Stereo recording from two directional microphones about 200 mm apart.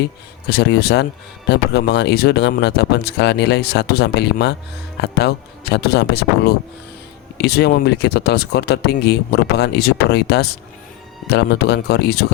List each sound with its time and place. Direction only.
0.5 s speech: 55° left (ahead or behind)